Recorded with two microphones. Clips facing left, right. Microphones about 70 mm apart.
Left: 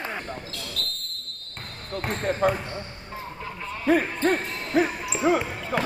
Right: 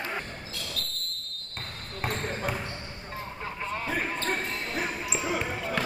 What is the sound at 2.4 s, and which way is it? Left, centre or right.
Basketball bounce, left.